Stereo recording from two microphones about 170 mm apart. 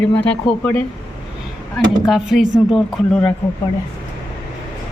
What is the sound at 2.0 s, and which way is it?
Speech, centre (ahead or behind).